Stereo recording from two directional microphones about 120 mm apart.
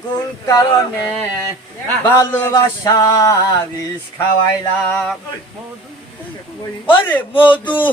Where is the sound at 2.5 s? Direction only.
30° left (ahead or behind).